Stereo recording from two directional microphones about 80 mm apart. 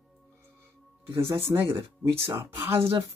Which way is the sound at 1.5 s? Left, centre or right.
Right.